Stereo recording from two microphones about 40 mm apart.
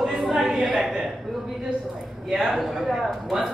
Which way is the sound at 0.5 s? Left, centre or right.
Centre.